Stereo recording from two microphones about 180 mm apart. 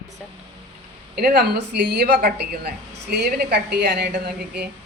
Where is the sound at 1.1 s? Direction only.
60° right (ahead or behind).